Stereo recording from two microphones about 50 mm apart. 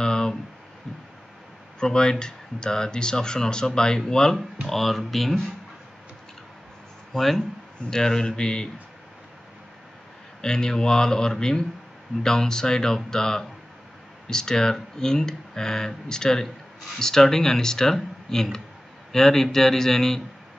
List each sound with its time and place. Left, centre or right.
0.0 s a sound: centre
1.8 s speech: centre
7.2 s speech: centre
10.4 s speech: centre